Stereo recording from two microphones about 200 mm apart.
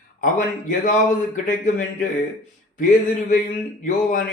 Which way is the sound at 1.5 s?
40° left (ahead or behind).